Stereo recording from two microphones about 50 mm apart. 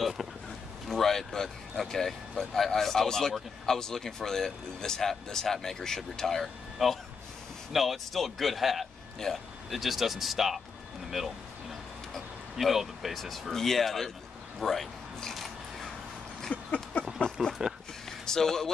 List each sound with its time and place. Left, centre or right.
0.8 s speech: centre
9.2 s speech: centre
9.7 s speech: centre
15.3 s scissors: centre
16.5 s a sound: left
17.4 s speech: centre
18.2 s speech: centre